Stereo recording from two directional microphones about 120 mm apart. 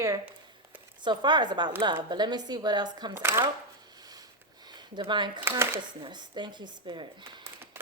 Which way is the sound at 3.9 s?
35° right (ahead or behind).